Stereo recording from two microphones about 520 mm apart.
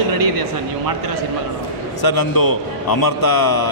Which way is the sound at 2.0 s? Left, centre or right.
Left.